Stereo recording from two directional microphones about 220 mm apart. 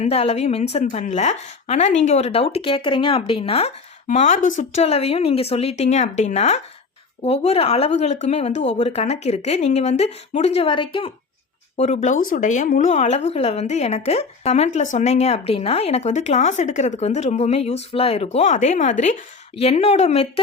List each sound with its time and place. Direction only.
0.0 s a woman's voice: 30° left (ahead or behind)